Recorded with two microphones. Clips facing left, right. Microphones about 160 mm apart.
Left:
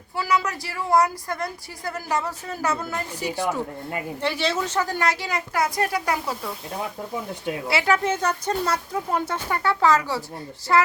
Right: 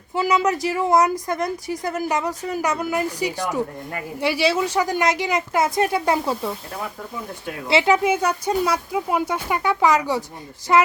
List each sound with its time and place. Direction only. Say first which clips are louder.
0.1 s a woman's voice: right 5 dB; 20° right (ahead or behind)
7.7 s speech: right 5 dB; 20° right (ahead or behind)